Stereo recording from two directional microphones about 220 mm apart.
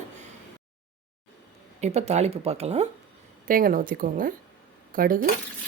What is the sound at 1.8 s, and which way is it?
Speech, 30° right (ahead or behind).